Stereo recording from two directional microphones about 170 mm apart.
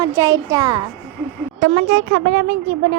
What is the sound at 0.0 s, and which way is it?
Speech, 20° right (ahead or behind).